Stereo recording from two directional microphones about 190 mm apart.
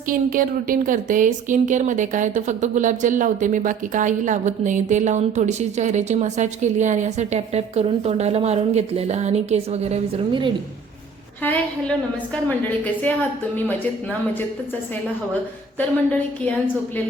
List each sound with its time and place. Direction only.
0.1 s speech: 45° right (ahead or behind); by 10.5 s 30° right (ahead or behind)
11.4 s a woman's voice: 10° left (ahead or behind)